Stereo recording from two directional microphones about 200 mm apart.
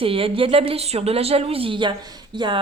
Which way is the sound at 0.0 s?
25° right (ahead or behind).